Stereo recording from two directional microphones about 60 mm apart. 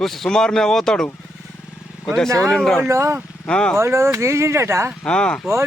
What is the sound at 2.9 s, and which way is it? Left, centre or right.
Speech, right.